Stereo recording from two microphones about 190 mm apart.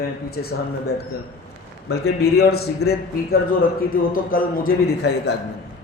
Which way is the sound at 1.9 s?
55° left (ahead or behind).